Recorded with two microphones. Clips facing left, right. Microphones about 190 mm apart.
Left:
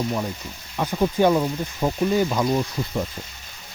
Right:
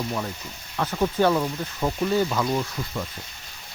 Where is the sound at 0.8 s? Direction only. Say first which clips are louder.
Left 2 dB; 15° left (ahead or behind).